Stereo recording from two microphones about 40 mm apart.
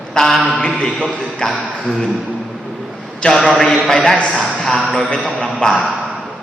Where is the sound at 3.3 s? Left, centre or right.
Centre.